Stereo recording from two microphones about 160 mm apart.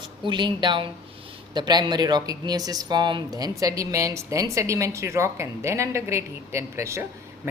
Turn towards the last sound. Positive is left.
turn(degrees=-15)  # may be behind; listen again after turning